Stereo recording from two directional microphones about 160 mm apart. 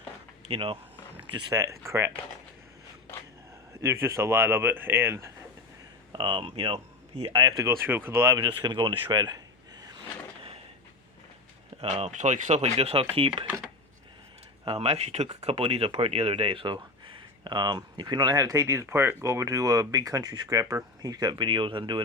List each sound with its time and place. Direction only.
0.5 s speech: 35° right (ahead or behind)
1.5 s speech: 20° right (ahead or behind)
4.0 s speech: 15° right (ahead or behind)
6.1 s speech: 30° right (ahead or behind)
7.3 s speech: 25° right (ahead or behind)
11.8 s speech: 40° right (ahead or behind)
14.6 s speech: 40° right (ahead or behind)